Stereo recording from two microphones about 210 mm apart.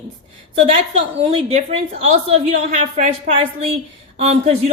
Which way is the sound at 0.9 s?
30° right (ahead or behind).